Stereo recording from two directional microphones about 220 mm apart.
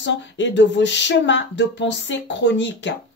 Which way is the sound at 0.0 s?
55° left (ahead or behind).